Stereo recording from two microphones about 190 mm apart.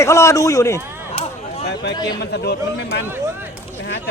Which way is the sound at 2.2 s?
60° left (ahead or behind).